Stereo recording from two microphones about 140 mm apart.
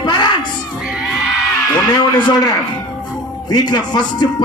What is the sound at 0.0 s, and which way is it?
Music, 35° left (ahead or behind).